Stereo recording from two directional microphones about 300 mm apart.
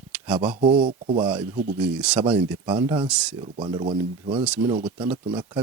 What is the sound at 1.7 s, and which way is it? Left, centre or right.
Speech, centre.